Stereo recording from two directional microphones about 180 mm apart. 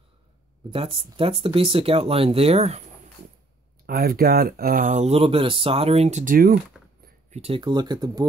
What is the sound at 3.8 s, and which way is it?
Speech, 55° right (ahead or behind).